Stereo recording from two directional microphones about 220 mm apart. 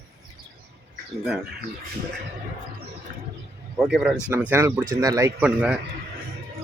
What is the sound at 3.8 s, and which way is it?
Speech, centre (ahead or behind).